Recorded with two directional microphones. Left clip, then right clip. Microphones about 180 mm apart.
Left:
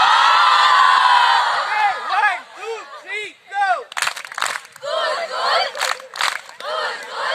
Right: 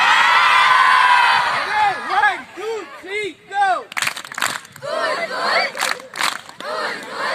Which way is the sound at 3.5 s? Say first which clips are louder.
Right 1 dB; 20° left (ahead or behind).